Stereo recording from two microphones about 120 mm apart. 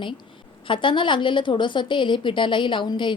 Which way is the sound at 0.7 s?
45° left (ahead or behind).